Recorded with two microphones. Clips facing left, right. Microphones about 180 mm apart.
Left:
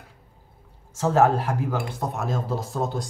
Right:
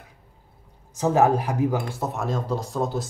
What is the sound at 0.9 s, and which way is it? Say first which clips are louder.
Speech: even; 15° right (ahead or behind).